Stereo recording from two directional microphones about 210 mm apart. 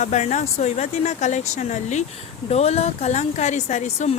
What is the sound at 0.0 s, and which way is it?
A woman's voice, 35° left (ahead or behind).